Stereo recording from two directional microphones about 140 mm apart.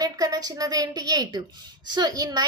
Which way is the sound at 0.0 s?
25° right (ahead or behind).